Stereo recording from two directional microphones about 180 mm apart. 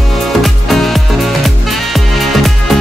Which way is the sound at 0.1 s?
Centre (ahead or behind).